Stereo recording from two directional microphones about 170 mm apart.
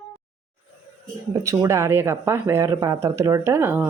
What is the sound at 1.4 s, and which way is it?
Speech, 20° right (ahead or behind).